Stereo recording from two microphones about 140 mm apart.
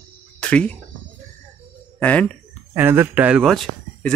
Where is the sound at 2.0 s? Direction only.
10° left (ahead or behind).